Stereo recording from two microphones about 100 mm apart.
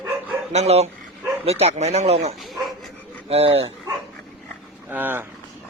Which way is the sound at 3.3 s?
75° right (ahead or behind).